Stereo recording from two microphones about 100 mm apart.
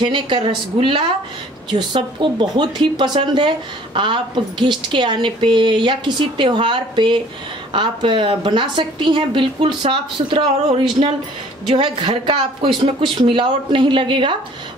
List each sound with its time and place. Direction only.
0.0 s a woman's voice: 55° right (ahead or behind)